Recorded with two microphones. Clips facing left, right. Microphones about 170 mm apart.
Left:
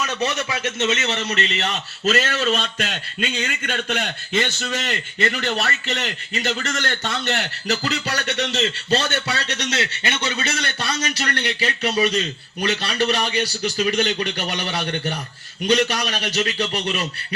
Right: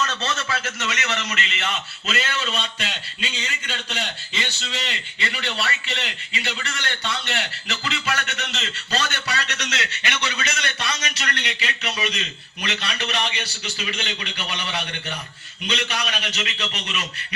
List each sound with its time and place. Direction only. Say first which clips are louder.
0.0 s a man's voice: left 3 dB; 15° left (ahead or behind); by 17.1 s 35° left (ahead or behind)